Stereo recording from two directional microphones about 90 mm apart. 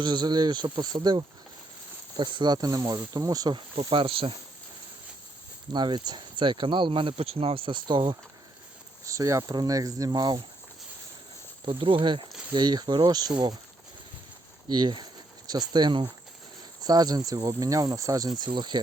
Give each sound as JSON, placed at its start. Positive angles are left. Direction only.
{"t": 0.0, "sound": "speech", "side_deg": -55}
{"t": 2.1, "sound": "speech", "side_deg": -65}
{"t": 2.5, "sound": "speech", "side_deg": -45}
{"t": 3.8, "sound": "speech", "side_deg": -80}
{"t": 5.7, "sound": "speech", "side_deg": -55}
{"t": 9.0, "sound": "speech", "side_deg": -40}
{"t": 11.6, "sound": "speech", "side_deg": -65}
{"t": 12.5, "sound": "speech", "side_deg": -50}
{"t": 14.7, "sound": "speech", "side_deg": -55}
{"t": 16.8, "sound": "speech", "side_deg": -45}
{"t": 18.3, "sound": "speech", "side_deg": -55}